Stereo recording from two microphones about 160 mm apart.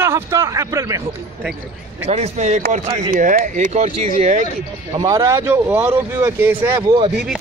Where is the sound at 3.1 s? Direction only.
60° right (ahead or behind).